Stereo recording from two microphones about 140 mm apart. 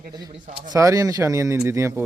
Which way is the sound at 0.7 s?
25° right (ahead or behind).